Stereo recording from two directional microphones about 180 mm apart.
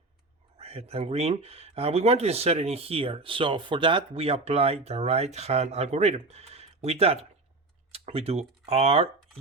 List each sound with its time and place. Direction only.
0.6 s speech: 35° right (ahead or behind)